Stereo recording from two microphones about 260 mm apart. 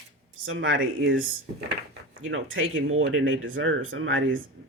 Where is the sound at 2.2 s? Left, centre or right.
Right.